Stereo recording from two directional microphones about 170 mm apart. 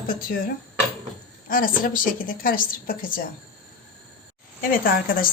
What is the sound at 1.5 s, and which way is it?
A woman's voice, 55° left (ahead or behind).